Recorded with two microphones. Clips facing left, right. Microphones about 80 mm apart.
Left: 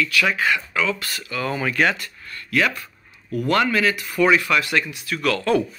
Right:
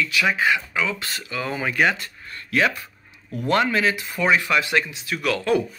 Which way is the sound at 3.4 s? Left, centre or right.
Right.